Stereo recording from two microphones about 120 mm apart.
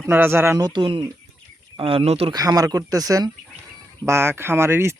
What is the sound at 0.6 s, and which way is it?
Speech, 40° right (ahead or behind).